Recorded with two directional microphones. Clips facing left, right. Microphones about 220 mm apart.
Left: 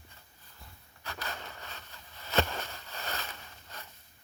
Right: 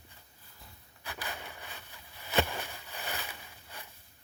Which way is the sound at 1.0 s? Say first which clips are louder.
Left 1 dB; 15° right (ahead or behind).